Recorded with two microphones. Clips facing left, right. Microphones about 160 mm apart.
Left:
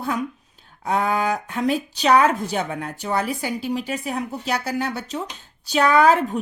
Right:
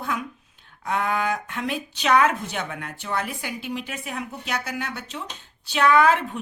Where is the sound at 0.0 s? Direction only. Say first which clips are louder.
Left 4 dB; 35° left (ahead or behind).